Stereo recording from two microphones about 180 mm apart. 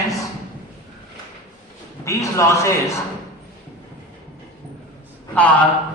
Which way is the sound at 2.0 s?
15° left (ahead or behind).